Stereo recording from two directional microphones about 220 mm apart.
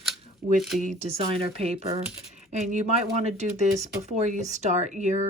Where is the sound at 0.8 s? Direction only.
30° right (ahead or behind).